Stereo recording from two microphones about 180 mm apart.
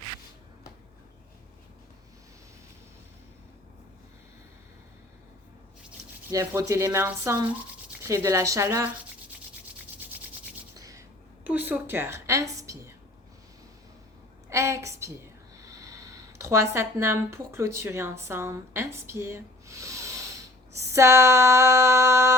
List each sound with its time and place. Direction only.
6.3 s a woman's voice: 15° right (ahead or behind)
10.8 s a sound: 20° right (ahead or behind)
11.4 s a woman's voice: 10° right (ahead or behind)
14.5 s a woman's voice: 15° right (ahead or behind)